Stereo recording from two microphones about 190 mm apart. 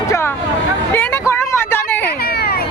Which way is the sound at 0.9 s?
10° left (ahead or behind).